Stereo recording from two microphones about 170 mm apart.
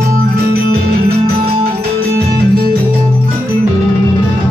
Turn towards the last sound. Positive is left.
turn(degrees=-65)  # may be behind; listen again after turning